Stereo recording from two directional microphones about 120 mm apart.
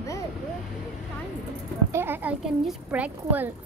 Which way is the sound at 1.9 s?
20° right (ahead or behind).